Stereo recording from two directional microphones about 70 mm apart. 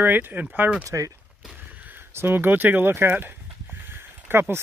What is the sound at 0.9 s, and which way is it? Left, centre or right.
Speech, right.